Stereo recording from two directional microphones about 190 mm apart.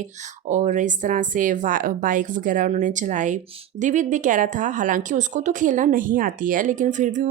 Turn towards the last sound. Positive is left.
turn(degrees=-40)  # may be behind; listen again after turning